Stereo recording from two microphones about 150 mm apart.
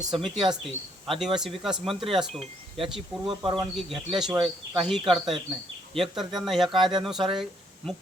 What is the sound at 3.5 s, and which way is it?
Speech, centre (ahead or behind).